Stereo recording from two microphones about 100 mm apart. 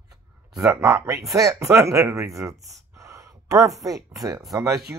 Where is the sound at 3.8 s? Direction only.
35° right (ahead or behind).